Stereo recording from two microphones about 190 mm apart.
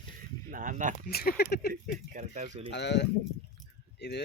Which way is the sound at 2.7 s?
65° left (ahead or behind).